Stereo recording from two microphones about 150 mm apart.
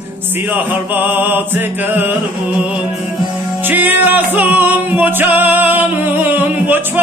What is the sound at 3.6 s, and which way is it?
Music, 10° right (ahead or behind).